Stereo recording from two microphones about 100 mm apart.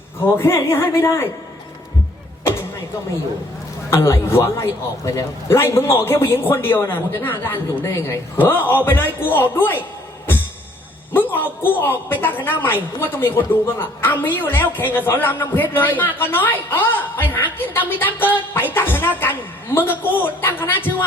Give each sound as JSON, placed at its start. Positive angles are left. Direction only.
{"t": 0.3, "sound": "a woman's voice", "side_deg": 25}
{"t": 3.8, "sound": "a woman's voice", "side_deg": 30}
{"t": 11.1, "sound": "a woman's voice", "side_deg": 20}